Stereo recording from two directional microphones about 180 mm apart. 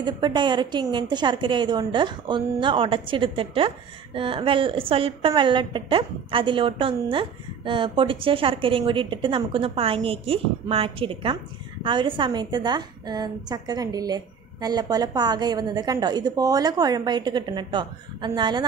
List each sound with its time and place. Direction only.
0.0 s a woman's voice: 25° right (ahead or behind)